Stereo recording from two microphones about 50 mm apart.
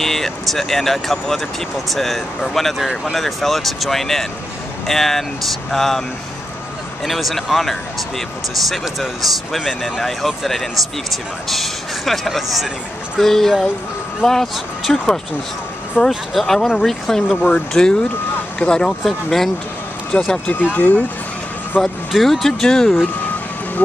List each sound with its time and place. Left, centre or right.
0.0 s speech: centre
7.1 s speech: centre
20.1 s speech: left
22.1 s speech: centre